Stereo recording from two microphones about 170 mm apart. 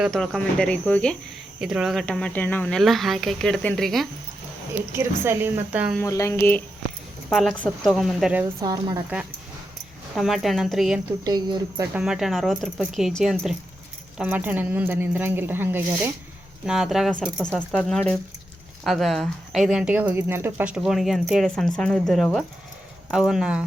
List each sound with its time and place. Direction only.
0.0 s speech: centre (ahead or behind)
1.6 s speech: 5° right (ahead or behind)
4.9 s speech: 15° right (ahead or behind)
6.0 s speech: 15° left (ahead or behind); by 8.4 s 5° right (ahead or behind)
8.6 s speech: 25° right (ahead or behind)
10.2 s speech: centre (ahead or behind)
11.2 s speech: 25° right (ahead or behind)
11.9 s speech: 5° right (ahead or behind)
16.6 s speech: centre (ahead or behind)